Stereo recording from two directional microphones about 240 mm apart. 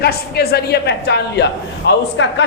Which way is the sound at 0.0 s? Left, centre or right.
Left.